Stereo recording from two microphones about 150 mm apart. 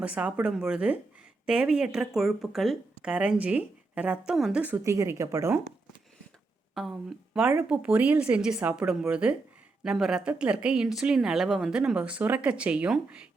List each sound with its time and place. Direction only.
0.0 s speech: 10° right (ahead or behind)
4.8 s speech: 20° right (ahead or behind)
7.7 s speech: 10° right (ahead or behind)